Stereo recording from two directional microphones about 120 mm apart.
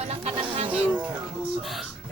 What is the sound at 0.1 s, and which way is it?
Music, 60° right (ahead or behind).